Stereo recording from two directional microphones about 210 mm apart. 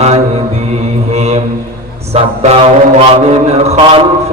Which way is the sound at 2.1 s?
30° right (ahead or behind).